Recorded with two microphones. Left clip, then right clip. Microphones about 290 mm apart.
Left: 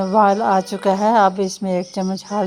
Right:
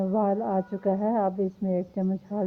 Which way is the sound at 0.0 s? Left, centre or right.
Left.